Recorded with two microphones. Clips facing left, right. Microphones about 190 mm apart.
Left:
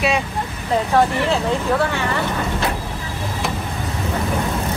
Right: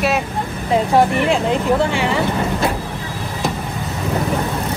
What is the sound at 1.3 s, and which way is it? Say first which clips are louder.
Speech: right 3 dB; 15° right (ahead or behind).